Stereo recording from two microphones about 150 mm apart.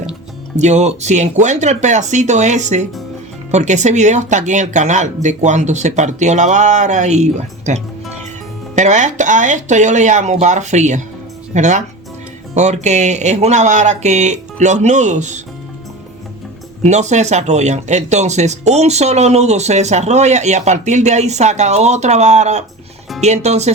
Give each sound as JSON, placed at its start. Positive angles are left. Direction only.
{"t": 0.5, "sound": "speech", "side_deg": -50}
{"t": 16.8, "sound": "speech", "side_deg": -50}